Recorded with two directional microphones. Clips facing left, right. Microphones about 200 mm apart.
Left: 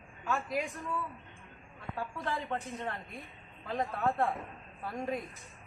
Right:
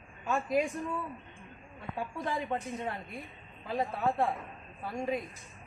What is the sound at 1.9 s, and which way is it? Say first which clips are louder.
Speech: right 2 dB; 15° right (ahead or behind).